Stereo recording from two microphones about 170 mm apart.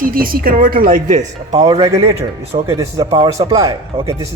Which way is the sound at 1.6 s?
30° right (ahead or behind).